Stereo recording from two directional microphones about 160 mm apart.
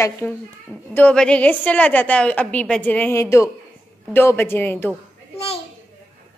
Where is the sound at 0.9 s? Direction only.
5° left (ahead or behind).